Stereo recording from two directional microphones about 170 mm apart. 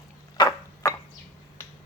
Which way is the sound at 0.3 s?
20° left (ahead or behind).